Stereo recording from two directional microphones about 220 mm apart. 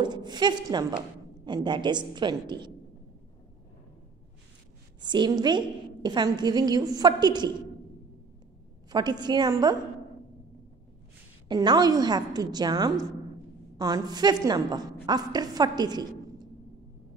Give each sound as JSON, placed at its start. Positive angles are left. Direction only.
{"t": 0.0, "sound": "a woman's voice", "side_deg": -20}
{"t": 5.0, "sound": "a woman's voice", "side_deg": -20}
{"t": 8.9, "sound": "a woman's voice", "side_deg": -20}
{"t": 11.4, "sound": "a woman's voice", "side_deg": -20}